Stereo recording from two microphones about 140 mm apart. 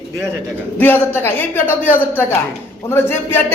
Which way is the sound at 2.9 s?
15° left (ahead or behind).